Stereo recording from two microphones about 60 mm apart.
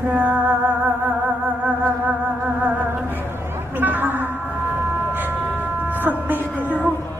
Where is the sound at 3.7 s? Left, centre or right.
Right.